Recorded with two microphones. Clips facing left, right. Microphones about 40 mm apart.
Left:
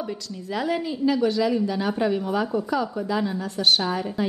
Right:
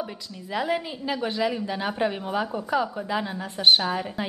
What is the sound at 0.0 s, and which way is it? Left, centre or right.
A woman's voice, centre.